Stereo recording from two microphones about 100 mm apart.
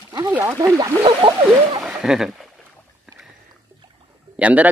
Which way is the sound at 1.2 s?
65° right (ahead or behind).